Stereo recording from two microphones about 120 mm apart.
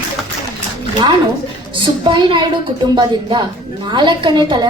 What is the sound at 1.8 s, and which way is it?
A woman's voice, 40° right (ahead or behind).